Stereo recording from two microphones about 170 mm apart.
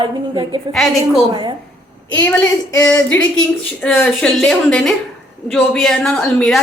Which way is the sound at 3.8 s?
5° left (ahead or behind).